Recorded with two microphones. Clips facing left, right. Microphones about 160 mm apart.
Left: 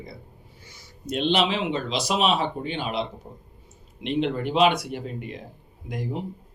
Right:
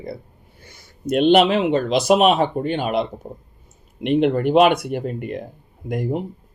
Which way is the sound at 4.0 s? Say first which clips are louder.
Right 8 dB; 55° right (ahead or behind).